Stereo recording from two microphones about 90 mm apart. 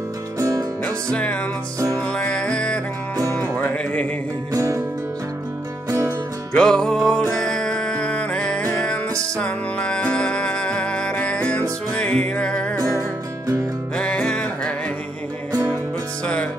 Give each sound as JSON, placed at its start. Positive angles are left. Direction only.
{"t": 0.4, "sound": "music", "side_deg": -35}
{"t": 1.1, "sound": "music", "side_deg": 15}
{"t": 1.8, "sound": "music", "side_deg": -35}
{"t": 2.1, "sound": "music", "side_deg": 10}
{"t": 5.9, "sound": "music", "side_deg": -35}
{"t": 6.5, "sound": "music", "side_deg": 5}
{"t": 13.9, "sound": "music", "side_deg": 10}